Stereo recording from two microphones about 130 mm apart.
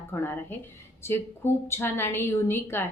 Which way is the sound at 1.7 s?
20° left (ahead or behind).